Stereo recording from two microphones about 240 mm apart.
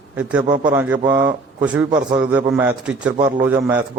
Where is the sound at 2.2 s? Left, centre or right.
Centre.